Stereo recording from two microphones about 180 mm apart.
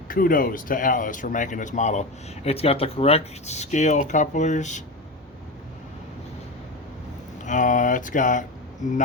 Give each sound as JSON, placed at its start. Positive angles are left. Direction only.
{"t": 0.1, "sound": "speech", "side_deg": 50}
{"t": 7.4, "sound": "speech", "side_deg": 45}